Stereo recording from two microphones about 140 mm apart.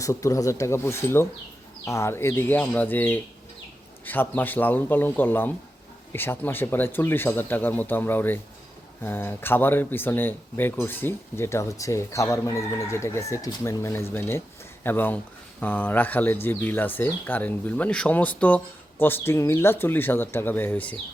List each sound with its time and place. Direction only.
0.0 s speech: 20° left (ahead or behind)